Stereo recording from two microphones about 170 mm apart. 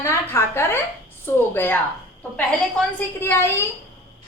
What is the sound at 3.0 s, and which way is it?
Speech, 15° left (ahead or behind).